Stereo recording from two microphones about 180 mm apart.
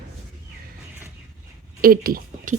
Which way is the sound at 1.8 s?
55° right (ahead or behind).